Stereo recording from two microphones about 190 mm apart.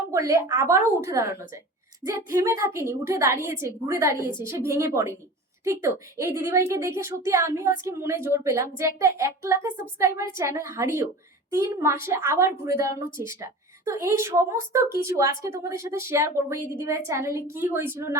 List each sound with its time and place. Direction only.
0.1 s a woman's voice: 15° right (ahead or behind)